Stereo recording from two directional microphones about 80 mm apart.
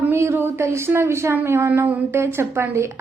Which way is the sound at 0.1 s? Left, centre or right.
Right.